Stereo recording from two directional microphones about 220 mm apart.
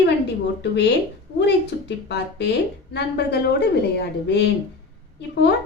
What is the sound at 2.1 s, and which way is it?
A woman's voice, 50° left (ahead or behind).